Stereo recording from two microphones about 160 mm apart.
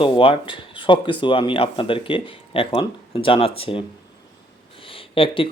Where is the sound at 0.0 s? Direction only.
35° left (ahead or behind).